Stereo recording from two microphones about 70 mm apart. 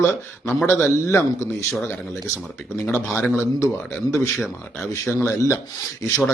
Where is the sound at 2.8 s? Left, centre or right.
Left.